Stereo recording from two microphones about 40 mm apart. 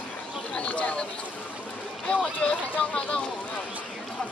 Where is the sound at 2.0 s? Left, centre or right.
Left.